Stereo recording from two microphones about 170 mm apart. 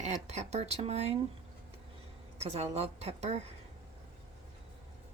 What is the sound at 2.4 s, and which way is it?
Speech, 35° right (ahead or behind).